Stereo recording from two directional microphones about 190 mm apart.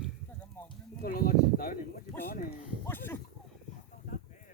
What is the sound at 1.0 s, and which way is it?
Speech, 50° left (ahead or behind).